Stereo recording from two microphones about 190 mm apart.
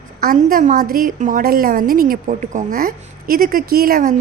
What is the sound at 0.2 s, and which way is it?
A woman's voice, 50° right (ahead or behind).